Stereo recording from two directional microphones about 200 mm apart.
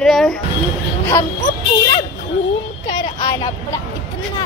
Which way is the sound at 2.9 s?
20° left (ahead or behind).